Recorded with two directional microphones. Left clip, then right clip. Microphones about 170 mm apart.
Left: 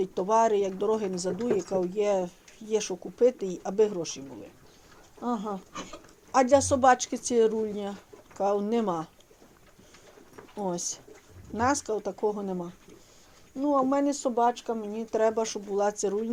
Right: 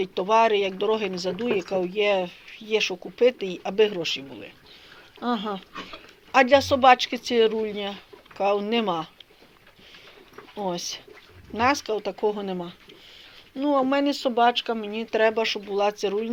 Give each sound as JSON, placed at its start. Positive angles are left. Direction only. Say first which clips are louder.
{"t": 0.0, "sound": "a man's voice", "louder": "right 4 dB", "side_deg": 20}
{"t": 6.3, "sound": "a man's voice", "louder": "right 4 dB", "side_deg": 15}
{"t": 10.6, "sound": "a man's voice", "louder": "right 3 dB", "side_deg": 15}
{"t": 12.2, "sound": "speech", "louder": "right 4 dB", "side_deg": 5}
{"t": 15.1, "sound": "speech", "louder": "right 4 dB", "side_deg": 15}